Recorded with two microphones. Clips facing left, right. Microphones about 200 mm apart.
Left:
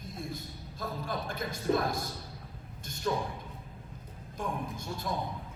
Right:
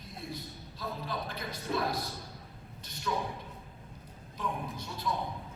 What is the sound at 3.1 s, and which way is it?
Speech, 45° left (ahead or behind).